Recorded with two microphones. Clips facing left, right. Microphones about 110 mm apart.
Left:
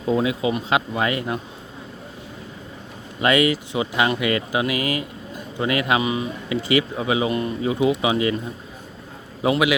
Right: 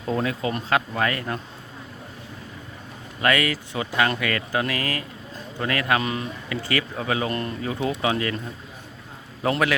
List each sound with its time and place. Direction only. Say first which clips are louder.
0.0 s speech: left 4 dB; 10° left (ahead or behind)
3.2 s speech: left 4 dB; 20° left (ahead or behind)
9.4 s speech: left 3 dB; 10° left (ahead or behind)